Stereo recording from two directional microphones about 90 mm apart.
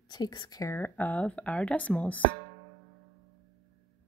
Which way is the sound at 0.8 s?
20° left (ahead or behind).